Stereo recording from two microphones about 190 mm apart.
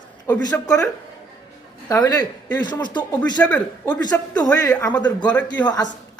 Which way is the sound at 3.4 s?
5° left (ahead or behind).